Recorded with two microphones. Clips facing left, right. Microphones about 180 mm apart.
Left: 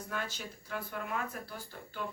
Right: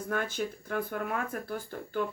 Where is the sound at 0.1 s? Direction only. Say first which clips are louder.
Right 9 dB; 55° right (ahead or behind).